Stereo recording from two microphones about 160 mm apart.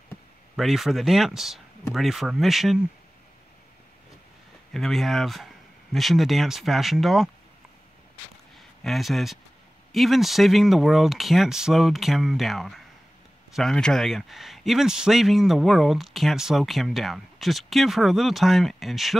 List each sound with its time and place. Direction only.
0.6 s a man's voice: centre (ahead or behind)
4.7 s a man's voice: centre (ahead or behind)
8.5 s a man's voice: centre (ahead or behind)